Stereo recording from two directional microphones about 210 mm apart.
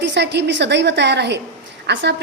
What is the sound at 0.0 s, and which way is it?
A woman's voice, 55° right (ahead or behind).